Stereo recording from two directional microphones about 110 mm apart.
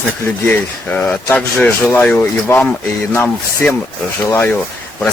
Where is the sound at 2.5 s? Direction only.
25° left (ahead or behind).